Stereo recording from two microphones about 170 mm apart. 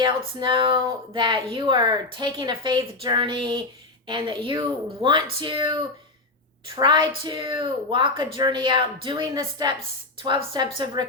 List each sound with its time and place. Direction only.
0.3 s speech: 30° right (ahead or behind)